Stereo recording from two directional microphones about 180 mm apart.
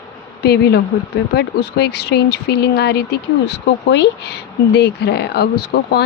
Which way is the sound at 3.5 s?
75° left (ahead or behind).